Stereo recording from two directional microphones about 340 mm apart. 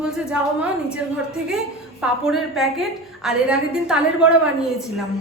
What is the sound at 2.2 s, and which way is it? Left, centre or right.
Speech, centre.